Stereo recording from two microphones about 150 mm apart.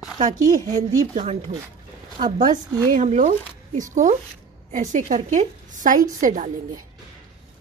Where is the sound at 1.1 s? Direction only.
45° right (ahead or behind).